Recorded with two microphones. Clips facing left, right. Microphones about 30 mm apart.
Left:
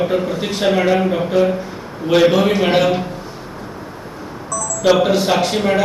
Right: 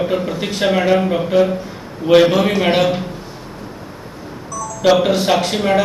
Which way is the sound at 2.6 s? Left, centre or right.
Centre.